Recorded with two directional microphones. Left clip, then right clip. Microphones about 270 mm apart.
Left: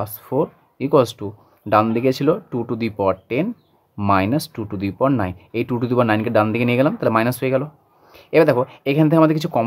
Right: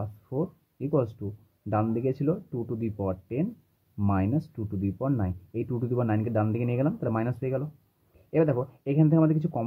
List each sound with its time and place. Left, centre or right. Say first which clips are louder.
0.0 s speech: left 12 dB; left